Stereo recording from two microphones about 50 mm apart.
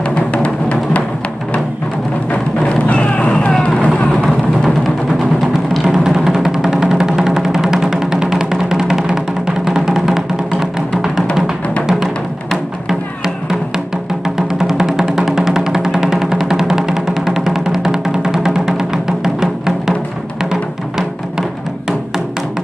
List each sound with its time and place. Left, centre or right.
0.1 s music: left
2.6 s music: left
5.7 s music: centre
14.6 s music: centre